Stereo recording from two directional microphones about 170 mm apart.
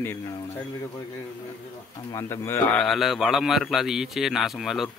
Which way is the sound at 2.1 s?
15° left (ahead or behind).